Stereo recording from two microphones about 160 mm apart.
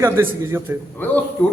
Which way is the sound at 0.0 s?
15° right (ahead or behind).